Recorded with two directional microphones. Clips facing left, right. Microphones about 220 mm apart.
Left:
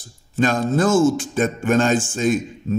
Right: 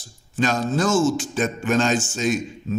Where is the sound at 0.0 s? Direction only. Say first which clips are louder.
Left 3 dB; 50° left (ahead or behind).